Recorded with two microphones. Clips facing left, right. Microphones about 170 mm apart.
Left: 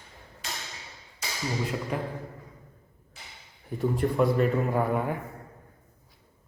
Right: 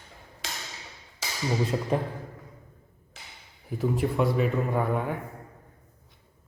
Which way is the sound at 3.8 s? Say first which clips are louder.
Left 1 dB; centre (ahead or behind).